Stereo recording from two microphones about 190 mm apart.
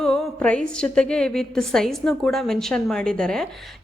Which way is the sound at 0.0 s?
5° left (ahead or behind).